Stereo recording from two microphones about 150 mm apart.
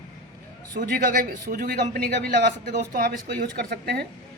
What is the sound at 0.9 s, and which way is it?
A man's voice, 70° right (ahead or behind).